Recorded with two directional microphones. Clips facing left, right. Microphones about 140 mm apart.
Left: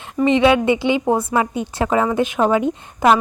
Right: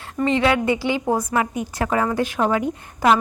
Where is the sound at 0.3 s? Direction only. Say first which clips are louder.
Left 5 dB; 20° left (ahead or behind).